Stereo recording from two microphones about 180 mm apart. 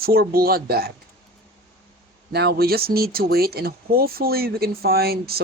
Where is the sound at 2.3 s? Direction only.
60° right (ahead or behind).